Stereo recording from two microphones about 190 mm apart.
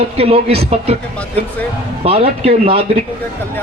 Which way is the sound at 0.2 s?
30° right (ahead or behind).